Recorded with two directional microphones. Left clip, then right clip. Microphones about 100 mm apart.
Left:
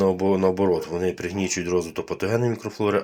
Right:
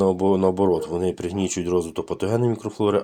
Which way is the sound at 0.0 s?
55° right (ahead or behind).